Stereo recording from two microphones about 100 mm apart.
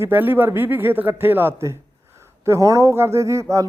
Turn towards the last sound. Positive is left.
turn(degrees=-30)  # may be behind; listen again after turning